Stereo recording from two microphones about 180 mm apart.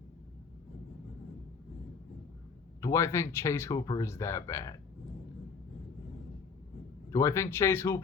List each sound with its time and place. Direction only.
2.8 s speech: 15° left (ahead or behind)
7.1 s speech: 15° left (ahead or behind)